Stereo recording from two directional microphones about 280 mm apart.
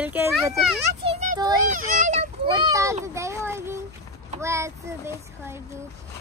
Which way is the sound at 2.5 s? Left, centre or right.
Centre.